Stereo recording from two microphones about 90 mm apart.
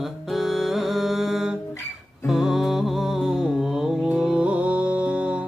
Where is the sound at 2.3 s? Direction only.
5° right (ahead or behind).